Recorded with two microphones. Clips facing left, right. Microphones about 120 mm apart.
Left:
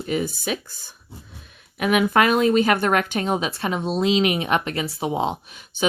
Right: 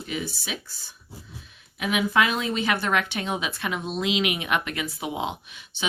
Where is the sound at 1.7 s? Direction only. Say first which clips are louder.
Left 5 dB; 55° left (ahead or behind); by 5.8 s 40° left (ahead or behind).